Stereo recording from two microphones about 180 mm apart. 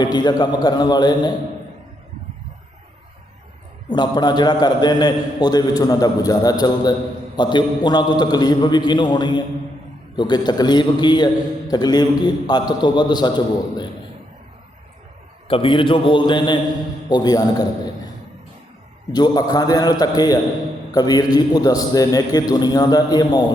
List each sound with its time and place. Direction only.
0.0 s a man's voice: 25° left (ahead or behind)
3.8 s a man's voice: 25° left (ahead or behind)
15.4 s a man's voice: 30° left (ahead or behind)
19.1 s a man's voice: 20° left (ahead or behind)